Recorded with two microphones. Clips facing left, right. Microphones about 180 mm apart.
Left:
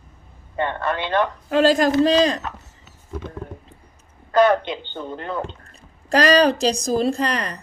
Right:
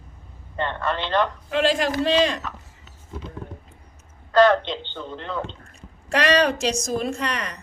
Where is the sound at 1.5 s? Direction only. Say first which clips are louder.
Left 7 dB; 40° left (ahead or behind).